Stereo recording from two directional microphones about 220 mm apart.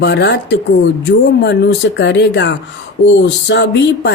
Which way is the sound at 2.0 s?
50° left (ahead or behind).